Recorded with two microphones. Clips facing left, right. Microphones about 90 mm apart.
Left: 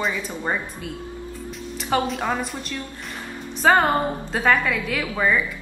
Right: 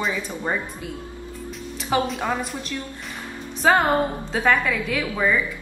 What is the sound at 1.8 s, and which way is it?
A woman's voice, centre (ahead or behind).